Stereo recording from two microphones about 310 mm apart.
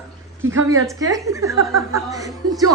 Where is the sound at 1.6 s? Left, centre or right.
Right.